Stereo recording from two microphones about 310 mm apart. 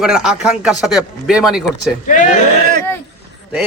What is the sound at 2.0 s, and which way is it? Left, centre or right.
Speech, left.